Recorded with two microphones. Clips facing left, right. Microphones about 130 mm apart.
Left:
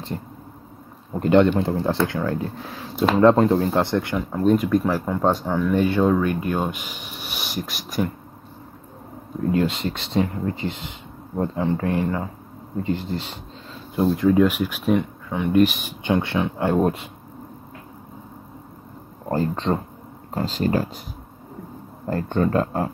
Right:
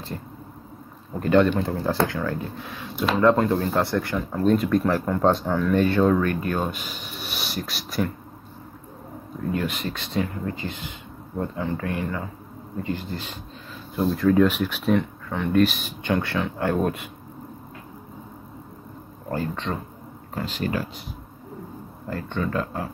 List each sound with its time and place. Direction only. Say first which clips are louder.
1.2 s speech: left 3 dB; 25° left (ahead or behind)
9.5 s speech: left 5 dB; 25° left (ahead or behind)
14.0 s speech: left 1 dB; 10° left (ahead or behind)
19.3 s speech: left 5 dB; 35° left (ahead or behind)
22.0 s speech: left 6 dB; 45° left (ahead or behind)